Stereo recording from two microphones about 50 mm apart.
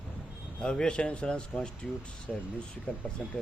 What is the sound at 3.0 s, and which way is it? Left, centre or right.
Speech, left.